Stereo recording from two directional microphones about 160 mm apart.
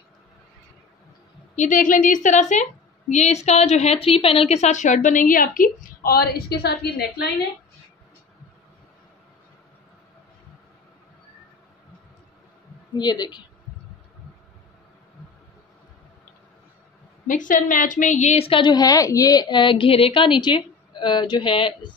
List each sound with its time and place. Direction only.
1.5 s a woman's voice: 50° left (ahead or behind); by 7.2 s 90° left
12.9 s a woman's voice: 25° left (ahead or behind)
17.3 s a woman's voice: 55° left (ahead or behind); by 21.9 s 30° left (ahead or behind)